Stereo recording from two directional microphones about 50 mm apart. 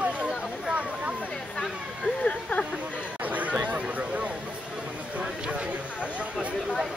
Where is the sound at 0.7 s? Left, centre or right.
Right.